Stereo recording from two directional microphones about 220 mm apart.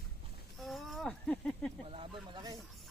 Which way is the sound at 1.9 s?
25° right (ahead or behind).